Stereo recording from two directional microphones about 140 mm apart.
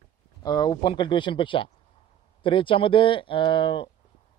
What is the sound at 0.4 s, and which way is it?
Speech, 30° left (ahead or behind).